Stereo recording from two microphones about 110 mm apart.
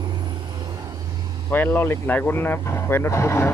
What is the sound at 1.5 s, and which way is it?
Speech, 20° left (ahead or behind).